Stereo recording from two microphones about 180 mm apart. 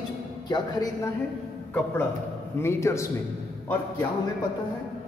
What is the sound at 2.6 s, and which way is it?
Speech, 15° left (ahead or behind).